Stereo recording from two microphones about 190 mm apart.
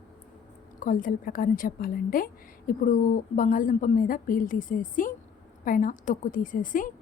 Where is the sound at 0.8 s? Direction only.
45° left (ahead or behind).